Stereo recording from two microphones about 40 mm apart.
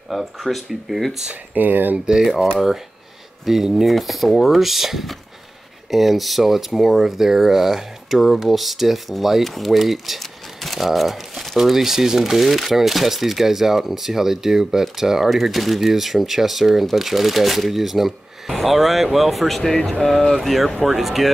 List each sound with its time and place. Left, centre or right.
0.1 s speech: centre
1.3 s speech: right
3.4 s speech: centre